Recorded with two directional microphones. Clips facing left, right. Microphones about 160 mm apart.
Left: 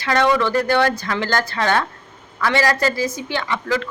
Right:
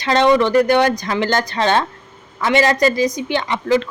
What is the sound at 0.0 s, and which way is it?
A woman's voice, 20° right (ahead or behind).